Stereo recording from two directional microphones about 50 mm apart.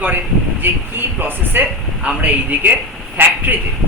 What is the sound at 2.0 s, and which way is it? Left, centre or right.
A man's voice, right.